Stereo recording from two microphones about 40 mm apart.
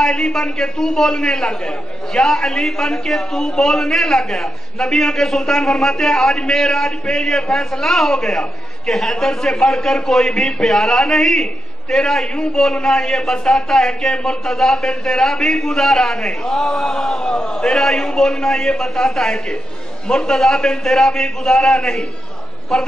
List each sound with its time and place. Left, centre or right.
0.0 s a man's voice: centre